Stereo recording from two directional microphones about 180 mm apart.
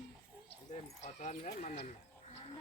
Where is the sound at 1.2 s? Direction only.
40° left (ahead or behind).